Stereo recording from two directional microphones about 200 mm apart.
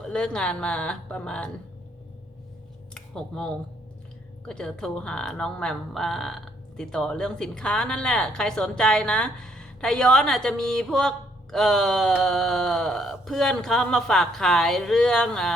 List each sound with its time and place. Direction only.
0.0 s speech: 5° left (ahead or behind)
2.9 s a sound: 5° left (ahead or behind)
4.4 s speech: 5° left (ahead or behind)